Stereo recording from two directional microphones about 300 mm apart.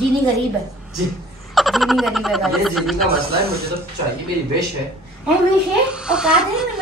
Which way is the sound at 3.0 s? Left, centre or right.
Right.